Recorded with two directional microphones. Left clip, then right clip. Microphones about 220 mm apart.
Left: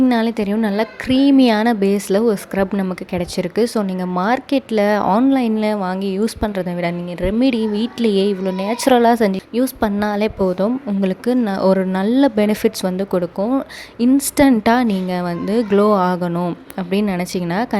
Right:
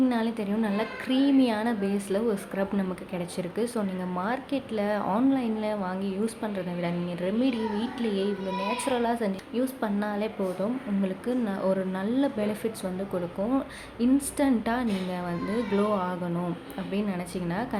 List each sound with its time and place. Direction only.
0.1 s a woman's voice: 40° left (ahead or behind)